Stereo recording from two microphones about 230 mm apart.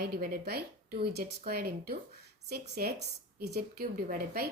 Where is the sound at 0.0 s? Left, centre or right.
Right.